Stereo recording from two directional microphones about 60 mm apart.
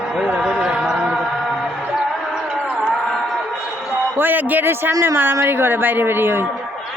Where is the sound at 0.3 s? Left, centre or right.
Centre.